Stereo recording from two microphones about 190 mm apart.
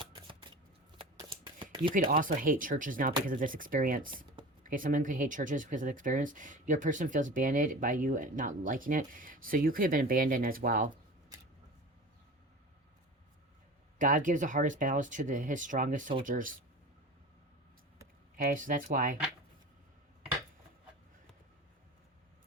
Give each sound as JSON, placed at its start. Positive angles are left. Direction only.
{"t": 0.0, "sound": "shuffling cards", "side_deg": -25}
{"t": 1.9, "sound": "speech", "side_deg": -50}
{"t": 14.0, "sound": "speech", "side_deg": -45}
{"t": 18.5, "sound": "speech", "side_deg": -45}